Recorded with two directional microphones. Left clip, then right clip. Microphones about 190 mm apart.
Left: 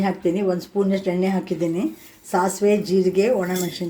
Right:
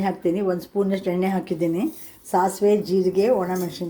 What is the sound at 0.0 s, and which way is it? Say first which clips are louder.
Speech: left 1 dB; centre (ahead or behind).